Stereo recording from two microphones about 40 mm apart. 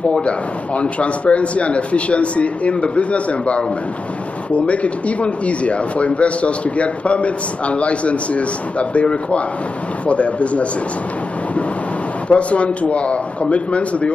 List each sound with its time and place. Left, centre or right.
0.1 s speech: left
12.3 s speech: left